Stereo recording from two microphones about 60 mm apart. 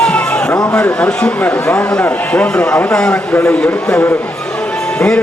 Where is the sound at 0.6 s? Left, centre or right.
Left.